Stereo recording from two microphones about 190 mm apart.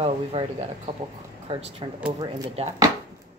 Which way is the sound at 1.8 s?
30° right (ahead or behind).